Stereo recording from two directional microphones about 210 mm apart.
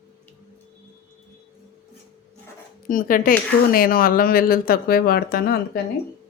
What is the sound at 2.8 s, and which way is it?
Speech, 40° left (ahead or behind).